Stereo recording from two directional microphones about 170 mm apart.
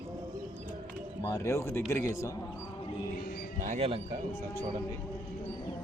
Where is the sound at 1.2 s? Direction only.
20° left (ahead or behind).